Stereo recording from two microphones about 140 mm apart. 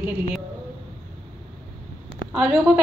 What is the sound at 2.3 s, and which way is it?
Speech, 5° right (ahead or behind).